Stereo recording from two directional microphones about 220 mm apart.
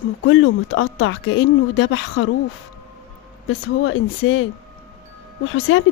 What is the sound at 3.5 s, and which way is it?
Speech, 65° left (ahead or behind).